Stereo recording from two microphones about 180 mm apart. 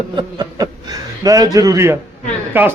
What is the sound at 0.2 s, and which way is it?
A man's voice, 20° right (ahead or behind).